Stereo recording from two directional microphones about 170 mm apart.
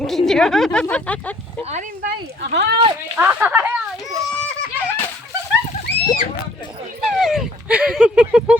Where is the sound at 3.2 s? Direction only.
10° right (ahead or behind).